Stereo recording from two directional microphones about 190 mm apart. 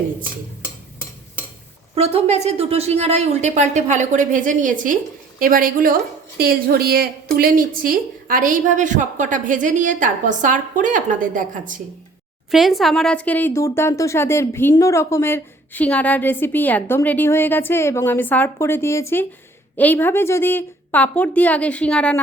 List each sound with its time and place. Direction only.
2.0 s a woman's voice: 35° right (ahead or behind)
12.5 s speech: centre (ahead or behind)